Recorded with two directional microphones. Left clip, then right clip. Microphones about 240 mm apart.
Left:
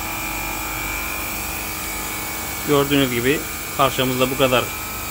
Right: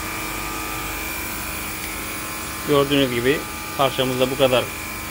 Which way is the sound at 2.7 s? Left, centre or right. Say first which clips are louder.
Even; left.